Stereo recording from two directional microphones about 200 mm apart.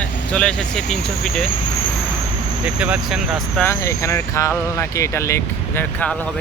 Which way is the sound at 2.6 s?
5° right (ahead or behind).